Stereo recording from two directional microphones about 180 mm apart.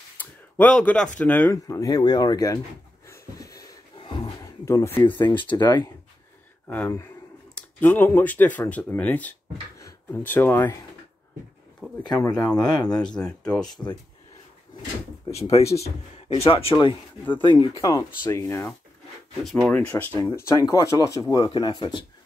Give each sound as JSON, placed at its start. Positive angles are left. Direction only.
{"t": 0.2, "sound": "speech", "side_deg": 10}
{"t": 3.1, "sound": "wheeze", "side_deg": 20}
{"t": 4.0, "sound": "a sound", "side_deg": 30}
{"t": 5.2, "sound": "speech", "side_deg": 25}
{"t": 6.7, "sound": "speech", "side_deg": 10}
{"t": 12.1, "sound": "speech", "side_deg": 20}
{"t": 13.0, "sound": "speech", "side_deg": 5}
{"t": 15.3, "sound": "speech", "side_deg": 35}
{"t": 18.4, "sound": "speech", "side_deg": 10}
{"t": 20.2, "sound": "speech", "side_deg": 15}